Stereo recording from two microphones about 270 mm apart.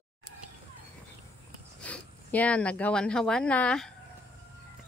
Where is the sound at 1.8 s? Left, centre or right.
Centre.